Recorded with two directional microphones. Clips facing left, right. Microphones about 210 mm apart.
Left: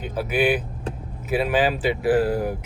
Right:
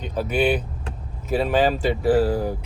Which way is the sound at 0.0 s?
5° left (ahead or behind).